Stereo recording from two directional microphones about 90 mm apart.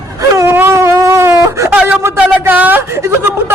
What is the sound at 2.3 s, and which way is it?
Speech, 20° right (ahead or behind).